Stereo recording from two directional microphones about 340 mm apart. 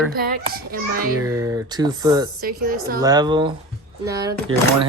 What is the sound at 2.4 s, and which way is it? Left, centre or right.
Speech, right.